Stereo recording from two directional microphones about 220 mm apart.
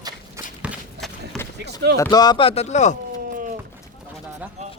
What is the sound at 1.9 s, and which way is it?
Speech, 15° left (ahead or behind).